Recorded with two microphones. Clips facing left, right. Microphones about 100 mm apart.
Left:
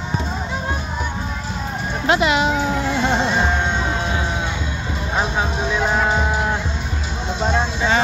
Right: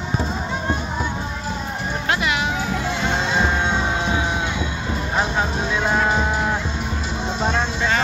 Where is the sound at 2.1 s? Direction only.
25° left (ahead or behind).